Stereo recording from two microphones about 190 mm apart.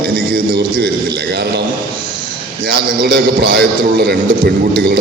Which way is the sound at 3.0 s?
55° right (ahead or behind).